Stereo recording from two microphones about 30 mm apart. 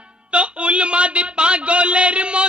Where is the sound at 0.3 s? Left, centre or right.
Right.